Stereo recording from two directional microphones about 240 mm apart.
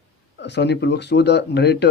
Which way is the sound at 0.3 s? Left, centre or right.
Left.